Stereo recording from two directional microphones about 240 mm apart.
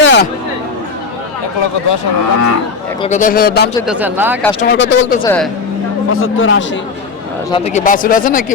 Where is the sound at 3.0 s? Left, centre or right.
Left.